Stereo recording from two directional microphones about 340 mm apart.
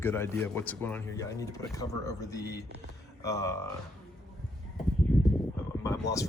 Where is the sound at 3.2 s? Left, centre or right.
Centre.